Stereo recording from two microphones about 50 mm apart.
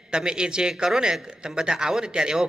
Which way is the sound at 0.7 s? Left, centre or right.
Centre.